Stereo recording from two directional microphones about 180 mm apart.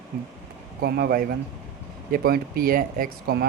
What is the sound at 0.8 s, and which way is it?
Speech, 60° right (ahead or behind).